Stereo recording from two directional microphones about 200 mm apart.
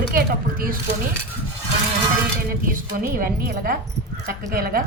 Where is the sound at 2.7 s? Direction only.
45° right (ahead or behind).